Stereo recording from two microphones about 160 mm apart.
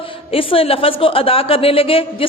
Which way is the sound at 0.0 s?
35° left (ahead or behind).